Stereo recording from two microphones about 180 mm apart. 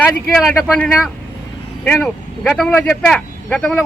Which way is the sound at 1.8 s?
5° left (ahead or behind).